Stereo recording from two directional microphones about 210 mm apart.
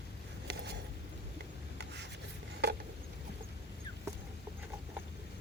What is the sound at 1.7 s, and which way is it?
Rub, 55° right (ahead or behind).